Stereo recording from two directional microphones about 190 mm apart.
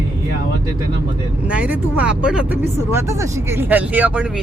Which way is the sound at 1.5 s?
10° right (ahead or behind).